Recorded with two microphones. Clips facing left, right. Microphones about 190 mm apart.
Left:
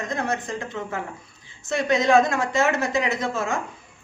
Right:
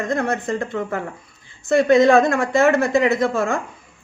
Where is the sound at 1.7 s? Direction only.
55° right (ahead or behind).